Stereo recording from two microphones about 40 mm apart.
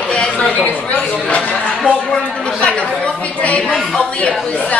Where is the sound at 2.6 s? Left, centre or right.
Left.